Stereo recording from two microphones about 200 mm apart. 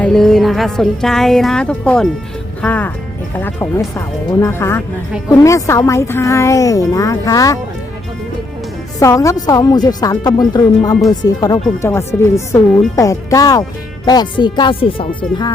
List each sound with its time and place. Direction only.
0.0 s a woman's voice: centre (ahead or behind)
9.0 s a woman's voice: 15° left (ahead or behind)